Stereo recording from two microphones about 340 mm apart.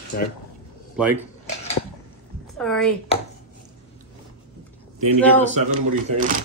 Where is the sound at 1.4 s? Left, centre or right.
Centre.